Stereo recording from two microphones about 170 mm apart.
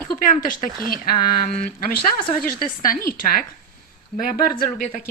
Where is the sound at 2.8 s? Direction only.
55° left (ahead or behind).